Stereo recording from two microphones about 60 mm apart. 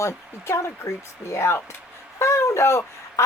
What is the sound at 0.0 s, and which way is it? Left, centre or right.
A woman's voice, left.